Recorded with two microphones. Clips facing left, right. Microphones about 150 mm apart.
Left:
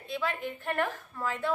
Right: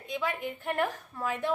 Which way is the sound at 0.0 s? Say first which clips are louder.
Even; 15° right (ahead or behind).